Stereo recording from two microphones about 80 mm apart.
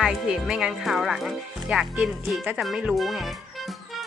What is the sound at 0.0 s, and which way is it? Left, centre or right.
Speech, centre.